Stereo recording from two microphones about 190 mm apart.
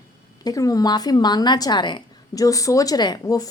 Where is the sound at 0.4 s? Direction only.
20° left (ahead or behind).